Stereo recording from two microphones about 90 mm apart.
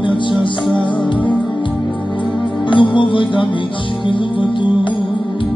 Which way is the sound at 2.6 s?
70° left (ahead or behind).